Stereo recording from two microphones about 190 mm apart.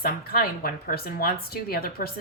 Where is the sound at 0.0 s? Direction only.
50° left (ahead or behind).